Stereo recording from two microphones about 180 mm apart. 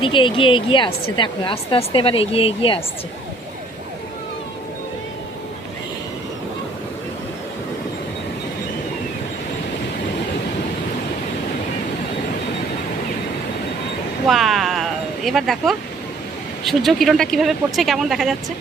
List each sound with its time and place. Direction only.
0.0 s a woman's voice: 30° left (ahead or behind)
14.3 s a sound: centre (ahead or behind)
16.6 s speech: centre (ahead or behind)